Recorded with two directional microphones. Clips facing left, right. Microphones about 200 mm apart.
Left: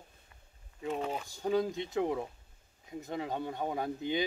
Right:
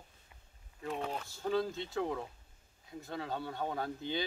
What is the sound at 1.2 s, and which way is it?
Speech, 15° left (ahead or behind).